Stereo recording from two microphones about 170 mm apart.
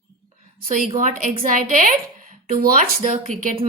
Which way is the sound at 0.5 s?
55° right (ahead or behind).